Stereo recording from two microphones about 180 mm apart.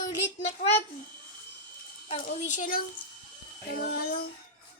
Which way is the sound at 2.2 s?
45° left (ahead or behind).